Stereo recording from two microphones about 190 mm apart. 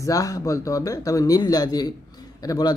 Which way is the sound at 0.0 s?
20° left (ahead or behind).